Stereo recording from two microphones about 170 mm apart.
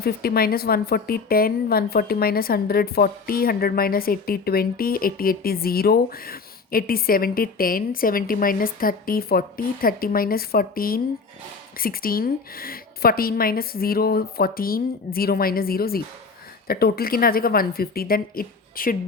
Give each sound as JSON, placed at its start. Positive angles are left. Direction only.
{"t": 0.0, "sound": "a woman's voice", "side_deg": 65}